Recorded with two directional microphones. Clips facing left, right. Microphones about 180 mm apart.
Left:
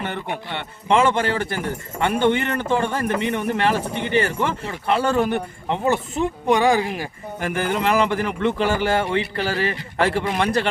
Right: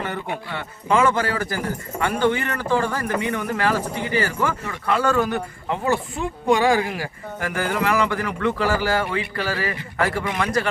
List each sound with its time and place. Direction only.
0.9 s a man's voice: 25° left (ahead or behind)